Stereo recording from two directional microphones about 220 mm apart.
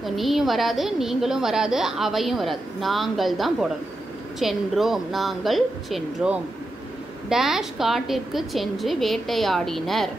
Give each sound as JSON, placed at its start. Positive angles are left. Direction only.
{"t": 0.0, "sound": "a woman's voice", "side_deg": 0}